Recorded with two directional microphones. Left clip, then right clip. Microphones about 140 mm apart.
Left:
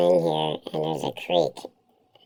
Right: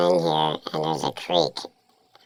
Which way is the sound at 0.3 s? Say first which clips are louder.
Right 3 dB; 45° right (ahead or behind).